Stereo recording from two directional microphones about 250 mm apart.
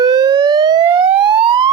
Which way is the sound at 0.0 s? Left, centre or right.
Centre.